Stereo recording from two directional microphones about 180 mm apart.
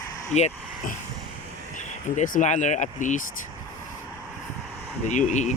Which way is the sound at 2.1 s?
45° left (ahead or behind).